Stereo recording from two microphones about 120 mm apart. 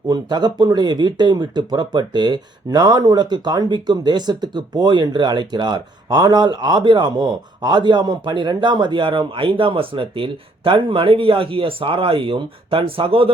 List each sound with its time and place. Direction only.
0.1 s speech: 35° right (ahead or behind)